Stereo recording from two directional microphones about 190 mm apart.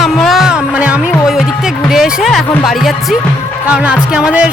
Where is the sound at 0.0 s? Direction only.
Centre (ahead or behind).